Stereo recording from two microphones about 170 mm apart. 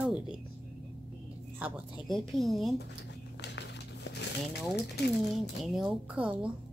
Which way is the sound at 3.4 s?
90° left.